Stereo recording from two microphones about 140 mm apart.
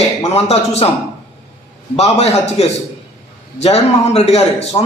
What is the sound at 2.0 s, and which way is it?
A man's voice, 50° left (ahead or behind).